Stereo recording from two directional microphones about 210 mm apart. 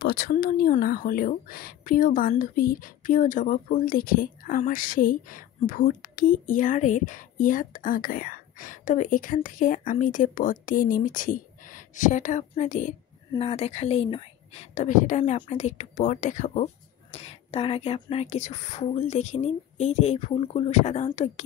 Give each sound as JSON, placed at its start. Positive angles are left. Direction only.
{"t": 0.0, "sound": "speech", "side_deg": 45}